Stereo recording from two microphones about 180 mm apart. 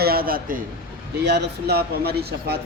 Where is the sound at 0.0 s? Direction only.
55° right (ahead or behind).